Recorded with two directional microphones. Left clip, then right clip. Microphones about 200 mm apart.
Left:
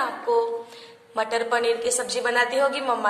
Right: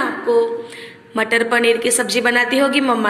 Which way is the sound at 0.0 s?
Centre (ahead or behind).